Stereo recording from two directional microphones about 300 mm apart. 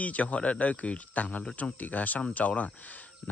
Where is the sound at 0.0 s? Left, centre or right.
Centre.